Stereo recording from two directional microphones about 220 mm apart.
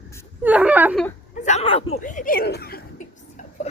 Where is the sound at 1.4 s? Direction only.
30° left (ahead or behind).